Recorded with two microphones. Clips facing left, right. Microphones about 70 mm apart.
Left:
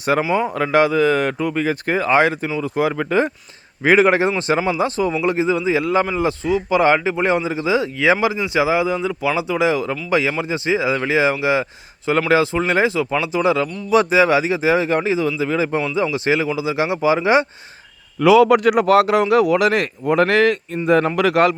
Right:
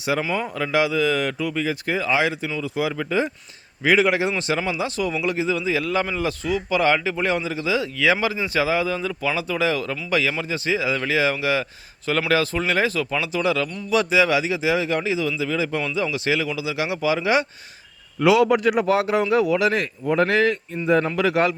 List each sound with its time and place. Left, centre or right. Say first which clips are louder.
0.1 s speech: left 7 dB; left
3.8 s speech: left 5 dB; left
18.4 s speech: left 5 dB; left